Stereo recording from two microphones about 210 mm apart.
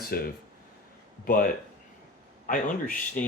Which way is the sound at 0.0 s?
45° left (ahead or behind).